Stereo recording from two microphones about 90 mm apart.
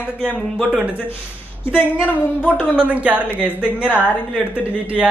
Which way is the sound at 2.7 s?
15° right (ahead or behind).